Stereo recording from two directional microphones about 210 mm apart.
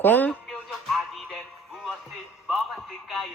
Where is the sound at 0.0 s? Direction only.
10° left (ahead or behind).